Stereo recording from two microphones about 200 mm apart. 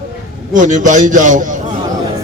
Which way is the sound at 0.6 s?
40° right (ahead or behind).